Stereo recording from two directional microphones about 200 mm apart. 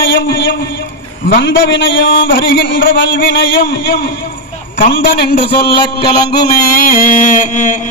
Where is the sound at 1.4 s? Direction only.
65° left (ahead or behind); by 5.1 s 45° left (ahead or behind).